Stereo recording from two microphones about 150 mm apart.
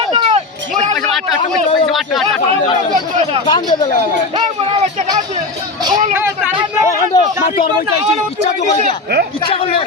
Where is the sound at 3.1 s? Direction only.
45° right (ahead or behind).